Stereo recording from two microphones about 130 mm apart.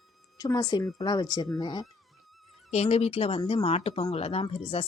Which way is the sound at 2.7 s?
55° left (ahead or behind).